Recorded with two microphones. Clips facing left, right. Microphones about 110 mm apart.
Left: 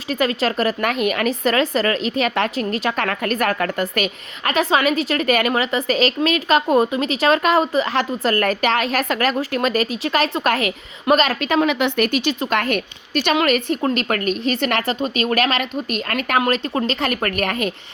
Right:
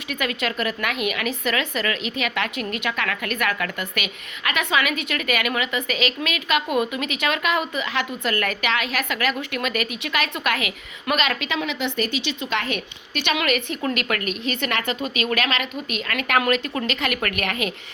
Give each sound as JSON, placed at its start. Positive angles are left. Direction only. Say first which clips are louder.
{"t": 0.1, "sound": "speech", "louder": "left 6 dB", "side_deg": 35}